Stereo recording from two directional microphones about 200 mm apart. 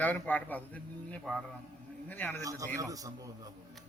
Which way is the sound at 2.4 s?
15° right (ahead or behind).